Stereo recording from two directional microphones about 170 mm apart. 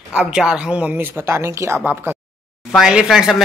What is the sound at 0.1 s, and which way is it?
Speech, 5° right (ahead or behind).